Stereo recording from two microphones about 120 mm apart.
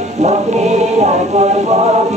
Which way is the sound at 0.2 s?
75° right (ahead or behind).